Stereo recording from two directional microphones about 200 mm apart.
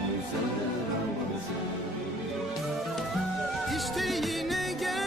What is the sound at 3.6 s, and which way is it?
Music, centre (ahead or behind).